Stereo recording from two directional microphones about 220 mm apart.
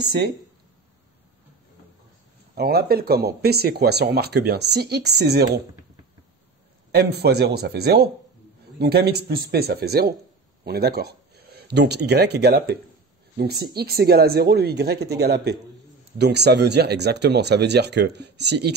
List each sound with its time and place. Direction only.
0.0 s speech: 50° right (ahead or behind)
2.5 s speech: 45° right (ahead or behind)
6.9 s speech: 45° right (ahead or behind)